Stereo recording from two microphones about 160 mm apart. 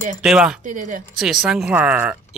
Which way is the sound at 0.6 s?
50° right (ahead or behind).